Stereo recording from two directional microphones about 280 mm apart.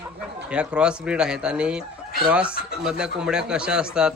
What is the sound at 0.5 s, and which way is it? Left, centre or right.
Speech, centre.